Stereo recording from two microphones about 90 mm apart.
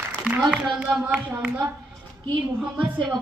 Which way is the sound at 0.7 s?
10° right (ahead or behind).